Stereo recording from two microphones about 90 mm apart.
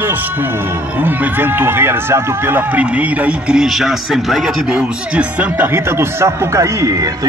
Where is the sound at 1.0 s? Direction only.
25° right (ahead or behind); by 4.5 s centre (ahead or behind).